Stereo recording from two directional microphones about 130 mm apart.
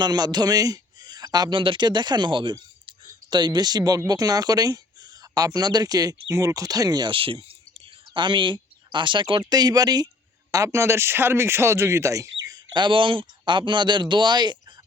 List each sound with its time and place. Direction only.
0.0 s a man's voice: 30° right (ahead or behind)